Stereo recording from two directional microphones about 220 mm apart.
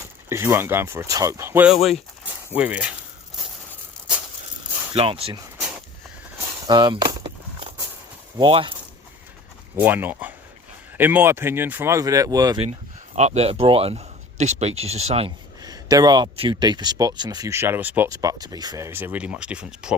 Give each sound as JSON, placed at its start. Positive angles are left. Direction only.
{"t": 0.3, "sound": "speech", "side_deg": -10}
{"t": 4.9, "sound": "speech", "side_deg": -25}
{"t": 6.7, "sound": "a sound", "side_deg": -20}
{"t": 8.4, "sound": "speech", "side_deg": -25}
{"t": 9.7, "sound": "speech", "side_deg": -10}
{"t": 13.1, "sound": "speech", "side_deg": -30}
{"t": 15.6, "sound": "speech", "side_deg": -15}